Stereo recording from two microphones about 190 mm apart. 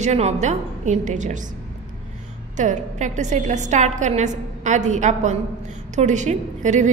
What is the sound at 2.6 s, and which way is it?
A woman's voice, 40° right (ahead or behind).